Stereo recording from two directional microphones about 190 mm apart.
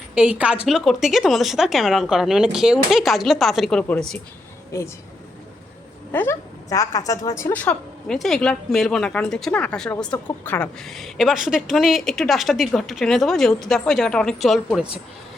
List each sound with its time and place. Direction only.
0.1 s a woman's voice: 5° right (ahead or behind)
4.7 s speech: 15° left (ahead or behind)
6.1 s a woman's voice: 10° left (ahead or behind)